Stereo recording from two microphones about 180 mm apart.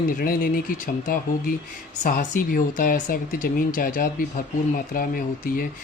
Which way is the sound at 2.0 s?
50° left (ahead or behind).